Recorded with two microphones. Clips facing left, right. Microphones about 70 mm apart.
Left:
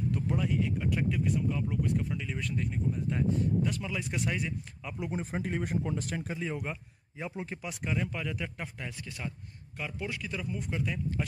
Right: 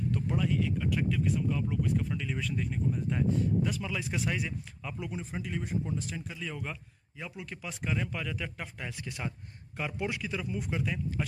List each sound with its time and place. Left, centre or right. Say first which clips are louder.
0.1 s speech: right 1 dB; centre
5.1 s speech: left 6 dB; left
6.3 s speech: left 4 dB; left
7.6 s speech: right 1 dB; centre
9.0 s a man's voice: right 2 dB; centre